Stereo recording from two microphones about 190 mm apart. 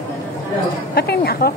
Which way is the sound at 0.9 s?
55° left (ahead or behind).